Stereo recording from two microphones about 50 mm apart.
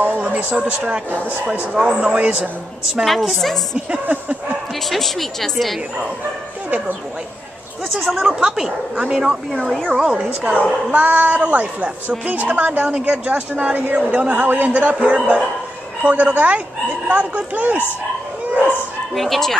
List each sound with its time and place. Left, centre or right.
0.0 s speech: right
1.1 s speech: right
1.7 s speech: centre
2.0 s speech: right
3.1 s speech: centre
4.8 s speech: centre
7.9 s speech: centre
8.4 s speech: centre
10.9 s speech: right
19.1 s speech: centre